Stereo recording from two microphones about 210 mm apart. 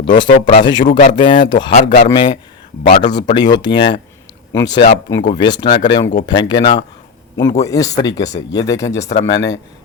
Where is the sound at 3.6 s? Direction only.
20° left (ahead or behind).